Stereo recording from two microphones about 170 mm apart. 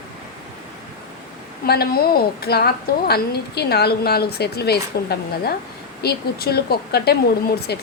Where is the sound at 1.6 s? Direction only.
65° left (ahead or behind).